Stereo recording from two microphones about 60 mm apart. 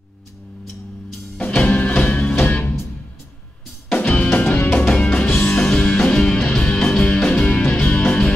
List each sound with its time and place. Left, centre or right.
1.4 s music: left
3.9 s music: left
4.8 s music: centre
7.2 s music: centre